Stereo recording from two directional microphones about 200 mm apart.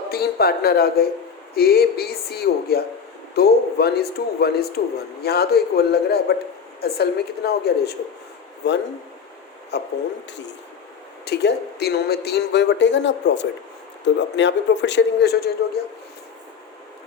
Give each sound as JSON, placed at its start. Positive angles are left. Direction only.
{"t": 0.1, "sound": "speech", "side_deg": 50}
{"t": 11.3, "sound": "speech", "side_deg": 55}